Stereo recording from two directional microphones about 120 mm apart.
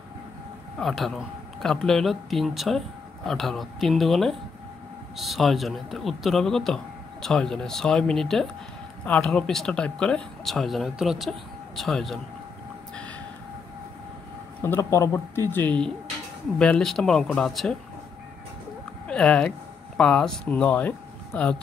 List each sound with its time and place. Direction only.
0.7 s a man's voice: centre (ahead or behind)
14.6 s a man's voice: 20° left (ahead or behind); by 17.7 s 5° left (ahead or behind)
19.0 s speech: 10° left (ahead or behind)